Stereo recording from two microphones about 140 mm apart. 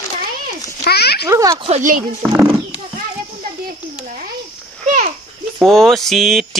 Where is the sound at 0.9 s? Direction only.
90° left.